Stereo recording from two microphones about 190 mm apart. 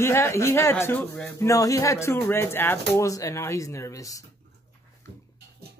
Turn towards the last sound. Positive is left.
turn(degrees=15)  # may be behind; listen again after turning